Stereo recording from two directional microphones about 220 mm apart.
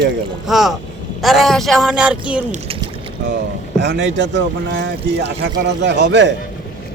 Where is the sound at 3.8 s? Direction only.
55° right (ahead or behind).